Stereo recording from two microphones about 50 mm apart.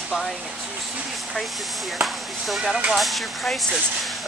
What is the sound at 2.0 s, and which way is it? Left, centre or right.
Speech, centre.